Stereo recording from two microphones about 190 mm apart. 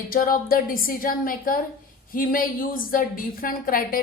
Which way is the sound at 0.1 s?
50° left (ahead or behind).